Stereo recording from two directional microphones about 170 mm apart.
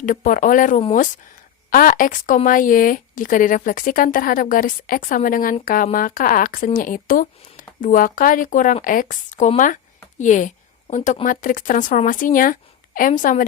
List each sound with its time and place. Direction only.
0.0 s a woman's voice: 50° left (ahead or behind)